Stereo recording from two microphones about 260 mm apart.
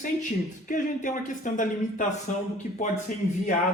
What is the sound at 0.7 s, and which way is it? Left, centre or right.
Speech, left.